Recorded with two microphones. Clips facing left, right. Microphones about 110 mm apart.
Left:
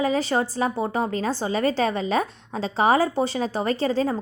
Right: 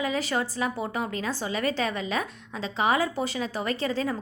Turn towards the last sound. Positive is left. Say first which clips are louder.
# left 5 dB
turn(degrees=30)  # may be behind; listen again after turning